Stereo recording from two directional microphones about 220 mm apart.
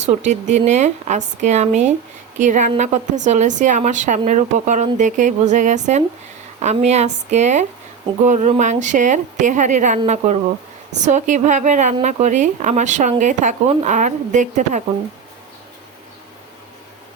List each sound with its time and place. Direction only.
0.0 s speech: 30° right (ahead or behind)
11.0 s speech: 35° right (ahead or behind)